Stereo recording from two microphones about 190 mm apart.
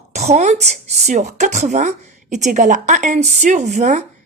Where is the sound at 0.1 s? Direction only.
35° right (ahead or behind).